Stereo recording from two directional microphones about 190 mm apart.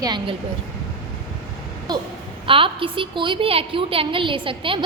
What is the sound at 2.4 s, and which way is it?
A woman's voice, 25° right (ahead or behind).